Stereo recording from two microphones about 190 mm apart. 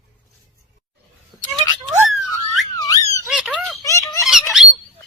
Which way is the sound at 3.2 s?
Centre (ahead or behind).